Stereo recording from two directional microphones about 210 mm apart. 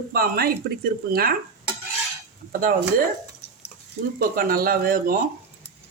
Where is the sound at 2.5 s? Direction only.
40° right (ahead or behind).